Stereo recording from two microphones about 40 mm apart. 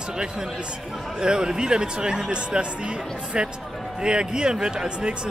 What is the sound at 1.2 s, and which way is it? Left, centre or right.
Speech, right.